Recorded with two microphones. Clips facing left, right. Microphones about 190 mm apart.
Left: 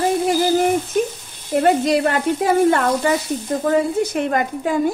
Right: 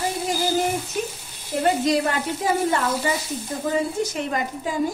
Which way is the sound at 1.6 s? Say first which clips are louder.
Left 4 dB; 65° left (ahead or behind).